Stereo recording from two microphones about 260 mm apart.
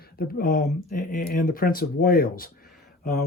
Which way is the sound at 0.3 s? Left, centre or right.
Left.